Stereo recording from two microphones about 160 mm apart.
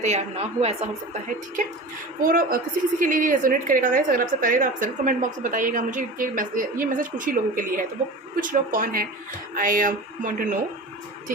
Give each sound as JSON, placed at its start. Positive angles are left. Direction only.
{"t": 0.0, "sound": "a woman's voice", "side_deg": -45}
{"t": 2.2, "sound": "a woman's voice", "side_deg": -65}